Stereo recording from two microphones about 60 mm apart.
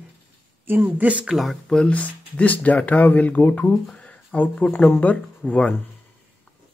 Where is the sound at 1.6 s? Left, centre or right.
Centre.